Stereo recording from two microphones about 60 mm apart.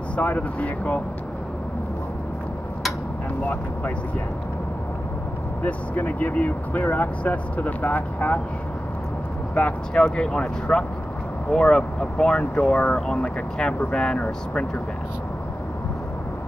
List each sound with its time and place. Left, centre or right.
0.1 s speech: left
5.6 s speech: left
9.6 s speech: left
10.0 s speech: centre